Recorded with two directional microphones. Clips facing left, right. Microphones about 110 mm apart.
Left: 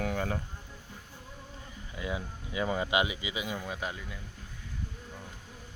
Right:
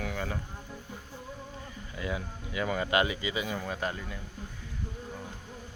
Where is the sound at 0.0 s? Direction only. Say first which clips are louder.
Left 3 dB; 40° left (ahead or behind).